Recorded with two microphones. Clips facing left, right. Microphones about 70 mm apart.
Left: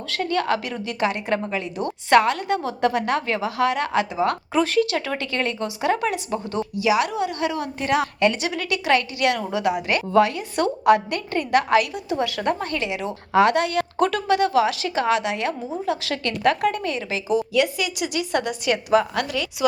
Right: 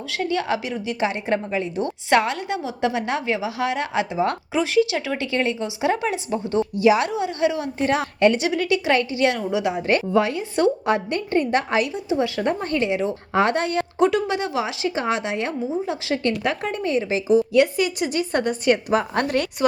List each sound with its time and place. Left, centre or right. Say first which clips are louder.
0.1 s a woman's voice: left 1 dB; centre
4.5 s speech: right 1 dB; centre; by 7.1 s right
7.1 s a woman's voice: right 2 dB; right
9.7 s a woman's voice: left 2 dB; right
12.1 s speech: right 1 dB; centre
12.7 s a woman's voice: right 4 dB; right
14.0 s a woman's voice: even; centre; by 19.4 s right